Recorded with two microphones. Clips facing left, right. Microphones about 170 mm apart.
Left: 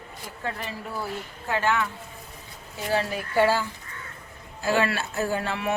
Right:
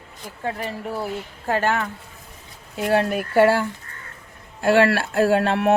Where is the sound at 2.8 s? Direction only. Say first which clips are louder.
Right 6 dB; 60° right (ahead or behind).